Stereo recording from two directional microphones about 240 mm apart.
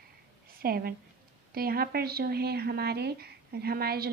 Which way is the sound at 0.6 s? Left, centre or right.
Right.